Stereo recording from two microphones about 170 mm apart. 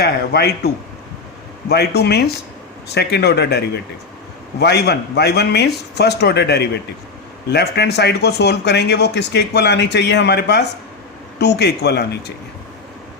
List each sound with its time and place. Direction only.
0.0 s a man's voice: 70° left (ahead or behind)
1.7 s a man's voice: 70° left (ahead or behind)
4.6 s a man's voice: 75° left (ahead or behind)